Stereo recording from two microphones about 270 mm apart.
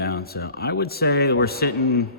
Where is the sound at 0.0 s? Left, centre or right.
Left.